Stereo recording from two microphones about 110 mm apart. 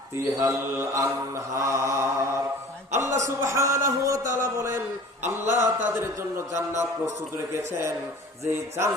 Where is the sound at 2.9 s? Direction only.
25° right (ahead or behind).